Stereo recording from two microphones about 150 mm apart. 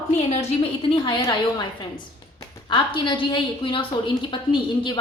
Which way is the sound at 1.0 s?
30° left (ahead or behind).